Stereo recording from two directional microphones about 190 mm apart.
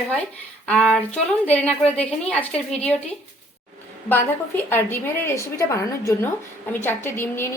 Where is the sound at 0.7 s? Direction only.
5° left (ahead or behind).